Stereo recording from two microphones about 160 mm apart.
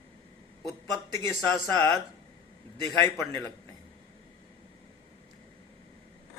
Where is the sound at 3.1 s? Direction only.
20° left (ahead or behind).